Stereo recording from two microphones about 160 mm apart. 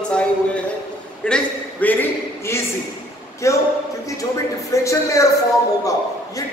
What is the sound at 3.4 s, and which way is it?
Speech, 20° left (ahead or behind).